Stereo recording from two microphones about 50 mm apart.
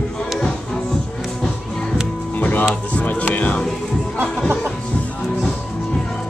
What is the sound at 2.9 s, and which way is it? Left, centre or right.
Speech, left.